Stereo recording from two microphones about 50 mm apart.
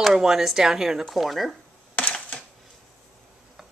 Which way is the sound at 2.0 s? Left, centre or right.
Left.